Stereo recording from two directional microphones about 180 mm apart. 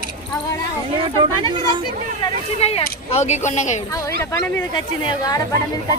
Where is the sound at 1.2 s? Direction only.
25° right (ahead or behind).